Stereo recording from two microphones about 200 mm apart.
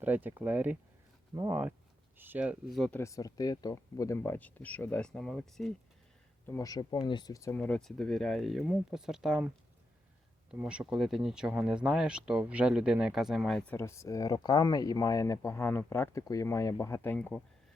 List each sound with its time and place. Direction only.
0.0 s speech: 10° right (ahead or behind)
3.0 s speech: 15° left (ahead or behind); by 5.7 s centre (ahead or behind)
6.5 s speech: 15° left (ahead or behind)
7.5 s speech: 5° left (ahead or behind)
10.5 s speech: 5° right (ahead or behind)